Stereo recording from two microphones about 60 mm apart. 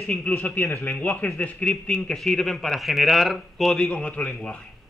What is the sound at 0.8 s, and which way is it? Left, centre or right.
A man's voice, left.